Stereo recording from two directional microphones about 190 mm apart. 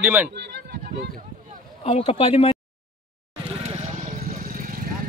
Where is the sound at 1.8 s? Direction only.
30° left (ahead or behind).